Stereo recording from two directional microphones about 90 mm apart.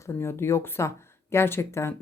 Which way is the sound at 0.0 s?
30° left (ahead or behind).